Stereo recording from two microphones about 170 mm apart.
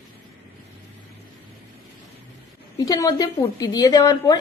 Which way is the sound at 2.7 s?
20° left (ahead or behind).